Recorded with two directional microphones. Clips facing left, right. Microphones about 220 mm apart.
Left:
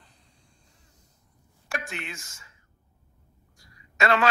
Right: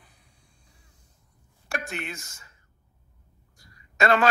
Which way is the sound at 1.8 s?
40° right (ahead or behind).